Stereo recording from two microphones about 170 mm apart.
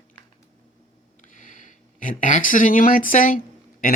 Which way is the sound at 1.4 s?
50° left (ahead or behind).